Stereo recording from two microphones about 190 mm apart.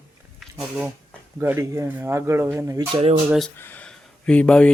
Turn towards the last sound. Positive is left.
turn(degrees=5)  # may be behind; listen again after turning